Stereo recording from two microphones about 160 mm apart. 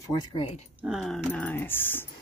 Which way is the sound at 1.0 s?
5° left (ahead or behind).